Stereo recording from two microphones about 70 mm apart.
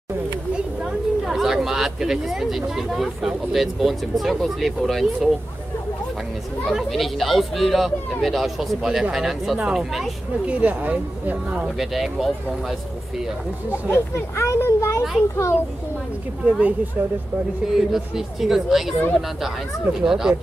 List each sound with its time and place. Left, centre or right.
1.2 s speech: centre
6.7 s speech: centre
10.4 s speech: centre
11.5 s speech: centre
13.7 s a child's voice: left
16.4 s speech: right
17.7 s speech: centre